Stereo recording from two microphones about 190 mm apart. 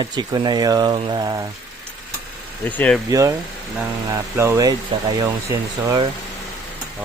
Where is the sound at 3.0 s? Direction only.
15° right (ahead or behind).